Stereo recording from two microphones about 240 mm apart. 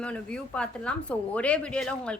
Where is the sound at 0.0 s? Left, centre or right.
Centre.